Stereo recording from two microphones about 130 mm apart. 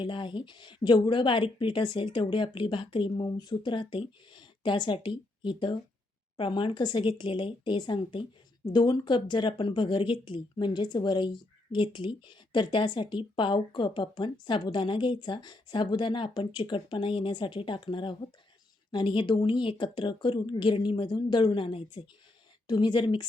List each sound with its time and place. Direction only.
0.0 s a woman's voice: 40° left (ahead or behind)